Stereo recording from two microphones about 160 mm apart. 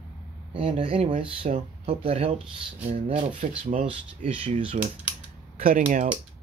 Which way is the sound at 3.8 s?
35° right (ahead or behind).